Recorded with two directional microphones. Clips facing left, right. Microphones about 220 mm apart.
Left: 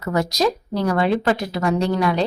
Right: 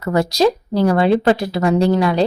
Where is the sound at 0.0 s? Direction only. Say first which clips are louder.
Right 5 dB; 30° right (ahead or behind).